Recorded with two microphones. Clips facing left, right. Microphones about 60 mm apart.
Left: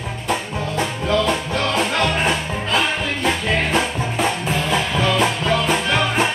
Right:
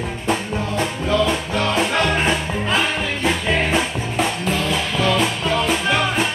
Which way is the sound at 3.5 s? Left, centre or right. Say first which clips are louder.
Right 2 dB; centre.